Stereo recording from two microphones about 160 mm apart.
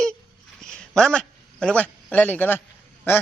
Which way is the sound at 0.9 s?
5° left (ahead or behind).